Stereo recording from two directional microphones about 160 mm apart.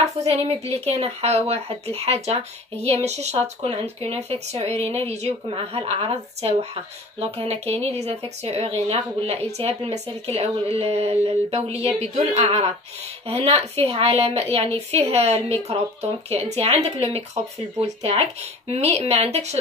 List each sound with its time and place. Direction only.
0.7 s speech: 40° right (ahead or behind)